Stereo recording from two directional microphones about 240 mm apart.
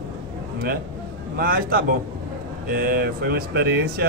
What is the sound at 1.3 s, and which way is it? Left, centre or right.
Speech, right.